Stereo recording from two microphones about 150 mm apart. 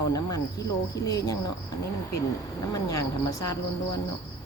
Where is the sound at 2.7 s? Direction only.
25° left (ahead or behind).